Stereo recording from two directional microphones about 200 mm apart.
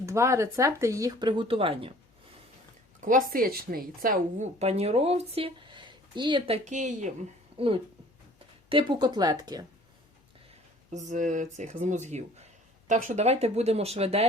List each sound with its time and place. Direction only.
0.0 s speech: 15° right (ahead or behind)
3.0 s speech: 40° right (ahead or behind)
7.5 s speech: 25° right (ahead or behind)
10.9 s speech: 40° right (ahead or behind)